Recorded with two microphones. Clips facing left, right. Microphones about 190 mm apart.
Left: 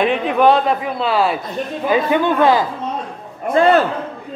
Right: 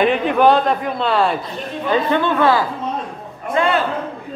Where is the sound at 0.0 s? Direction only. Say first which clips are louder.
Even; centre (ahead or behind); by 2.6 s 15° left (ahead or behind).